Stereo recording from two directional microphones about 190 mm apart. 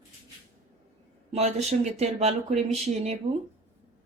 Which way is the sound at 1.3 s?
35° right (ahead or behind).